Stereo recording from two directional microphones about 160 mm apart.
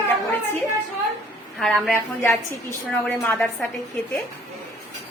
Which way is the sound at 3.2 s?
10° left (ahead or behind).